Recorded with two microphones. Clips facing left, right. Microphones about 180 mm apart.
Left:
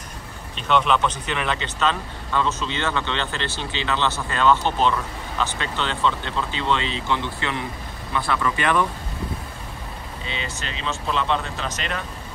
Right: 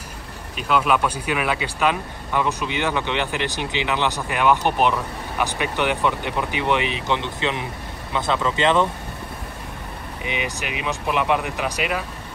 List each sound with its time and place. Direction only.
0.6 s speech: 5° right (ahead or behind)
10.2 s speech: 15° right (ahead or behind)